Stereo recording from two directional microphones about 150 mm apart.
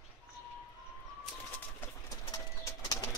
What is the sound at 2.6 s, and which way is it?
Bird, 20° left (ahead or behind).